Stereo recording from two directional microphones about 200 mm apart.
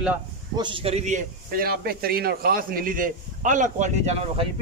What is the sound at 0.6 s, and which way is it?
Speech, 25° right (ahead or behind).